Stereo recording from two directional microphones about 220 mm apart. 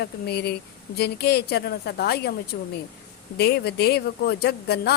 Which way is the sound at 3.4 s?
45° left (ahead or behind).